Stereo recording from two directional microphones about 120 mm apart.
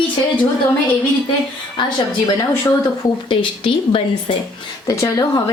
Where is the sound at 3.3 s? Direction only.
45° left (ahead or behind).